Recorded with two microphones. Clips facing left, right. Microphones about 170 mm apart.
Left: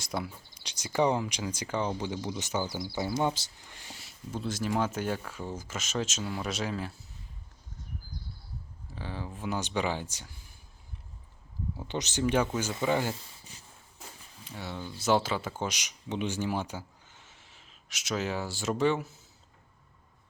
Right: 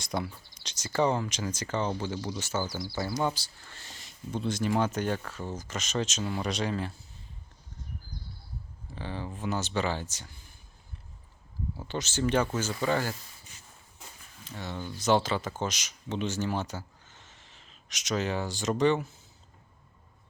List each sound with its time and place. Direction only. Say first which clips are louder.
0.0 s speech: right 2 dB; 5° left (ahead or behind)
9.0 s speech: right 2 dB; 5° left (ahead or behind)
11.9 s speech: even; 20° left (ahead or behind)
14.4 s speech: right 1 dB; 10° left (ahead or behind)